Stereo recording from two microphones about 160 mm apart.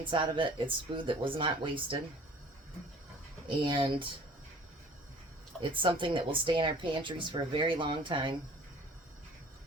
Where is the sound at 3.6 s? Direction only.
30° right (ahead or behind).